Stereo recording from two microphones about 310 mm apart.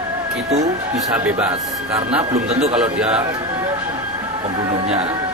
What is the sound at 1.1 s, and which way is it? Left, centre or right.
Speech, centre.